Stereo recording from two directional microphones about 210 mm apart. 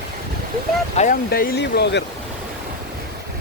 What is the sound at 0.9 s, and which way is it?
Speech, 40° left (ahead or behind).